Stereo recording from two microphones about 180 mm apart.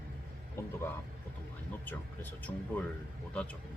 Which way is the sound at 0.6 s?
15° left (ahead or behind).